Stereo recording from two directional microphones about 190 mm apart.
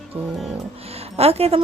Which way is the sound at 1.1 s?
30° right (ahead or behind).